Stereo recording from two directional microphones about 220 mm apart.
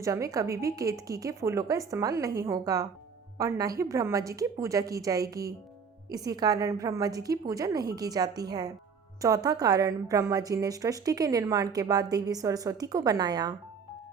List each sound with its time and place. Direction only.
0.0 s a woman's voice: 15° right (ahead or behind)